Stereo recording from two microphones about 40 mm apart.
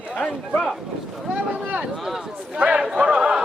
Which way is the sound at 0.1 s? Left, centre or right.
Left.